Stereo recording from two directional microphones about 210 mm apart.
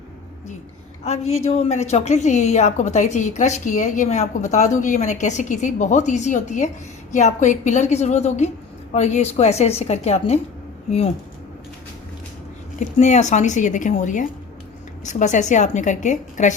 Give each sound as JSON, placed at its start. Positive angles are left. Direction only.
{"t": 1.0, "sound": "a woman's voice", "side_deg": 30}
{"t": 12.8, "sound": "a woman's voice", "side_deg": 35}